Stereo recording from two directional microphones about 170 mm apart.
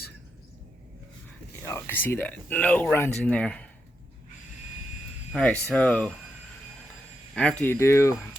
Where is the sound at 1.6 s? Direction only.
15° left (ahead or behind).